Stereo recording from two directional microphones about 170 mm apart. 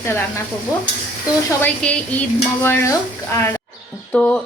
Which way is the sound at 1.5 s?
10° left (ahead or behind).